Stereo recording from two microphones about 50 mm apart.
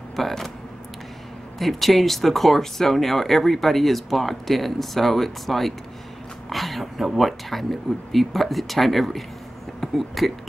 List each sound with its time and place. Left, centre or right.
0.1 s speech: centre
1.6 s speech: centre